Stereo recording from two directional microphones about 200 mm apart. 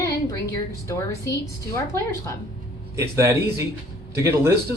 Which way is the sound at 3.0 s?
15° right (ahead or behind).